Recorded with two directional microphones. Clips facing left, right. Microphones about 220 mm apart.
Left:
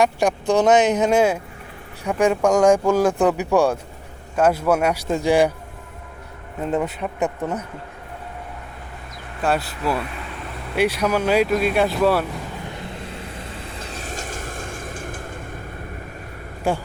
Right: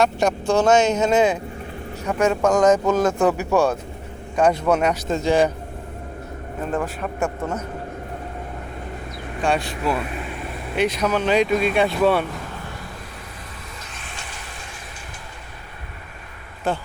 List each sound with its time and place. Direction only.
0.0 s speech: 15° left (ahead or behind)
6.7 s speech: 20° left (ahead or behind)
9.4 s speech: 5° left (ahead or behind)
13.8 s a sound: 40° left (ahead or behind)
16.7 s speech: 10° left (ahead or behind)